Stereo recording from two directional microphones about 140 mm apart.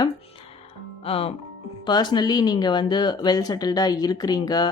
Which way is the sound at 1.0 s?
45° left (ahead or behind).